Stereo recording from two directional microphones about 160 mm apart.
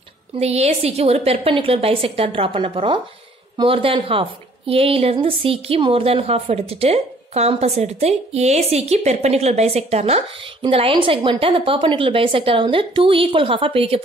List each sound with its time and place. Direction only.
0.4 s a woman's voice: 40° right (ahead or behind)